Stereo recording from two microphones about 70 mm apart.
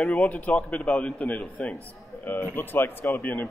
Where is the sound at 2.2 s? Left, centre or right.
Left.